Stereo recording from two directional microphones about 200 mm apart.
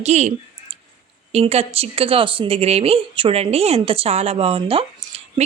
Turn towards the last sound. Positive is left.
turn(degrees=-30)  # may be behind; listen again after turning